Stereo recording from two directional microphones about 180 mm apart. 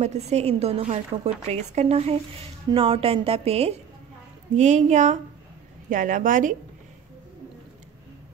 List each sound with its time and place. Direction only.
0.0 s a woman's voice: 35° right (ahead or behind)